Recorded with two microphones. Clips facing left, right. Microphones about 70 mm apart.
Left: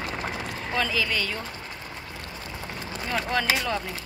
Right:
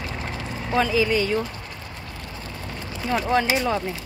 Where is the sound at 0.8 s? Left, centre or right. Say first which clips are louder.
Right 7 dB; right.